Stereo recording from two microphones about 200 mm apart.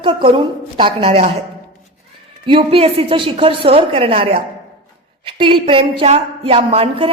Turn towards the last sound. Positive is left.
turn(degrees=-30)  # may be behind; listen again after turning